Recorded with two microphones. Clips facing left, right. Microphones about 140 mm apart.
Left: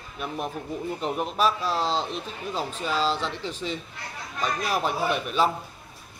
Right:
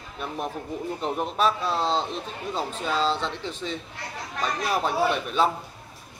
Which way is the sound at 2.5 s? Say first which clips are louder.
Right 1 dB; 10° left (ahead or behind).